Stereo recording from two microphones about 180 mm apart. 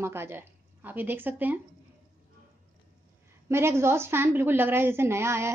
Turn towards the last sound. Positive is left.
turn(degrees=-15)  # may be behind; listen again after turning